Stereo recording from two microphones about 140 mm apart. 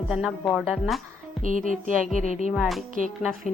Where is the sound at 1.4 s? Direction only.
70° right (ahead or behind).